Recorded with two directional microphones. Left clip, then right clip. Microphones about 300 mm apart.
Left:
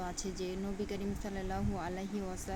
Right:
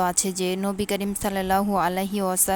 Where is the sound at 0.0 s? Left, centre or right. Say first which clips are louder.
Right 16 dB; right.